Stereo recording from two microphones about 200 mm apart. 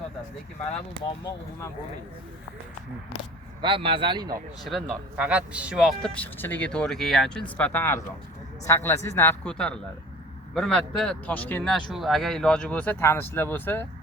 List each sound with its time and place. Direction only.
1.2 s speech: 15° left (ahead or behind)
3.6 s speech: 25° right (ahead or behind)
4.6 s speech: 5° right (ahead or behind)